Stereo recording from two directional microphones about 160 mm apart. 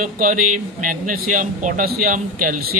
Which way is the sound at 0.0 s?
55° right (ahead or behind).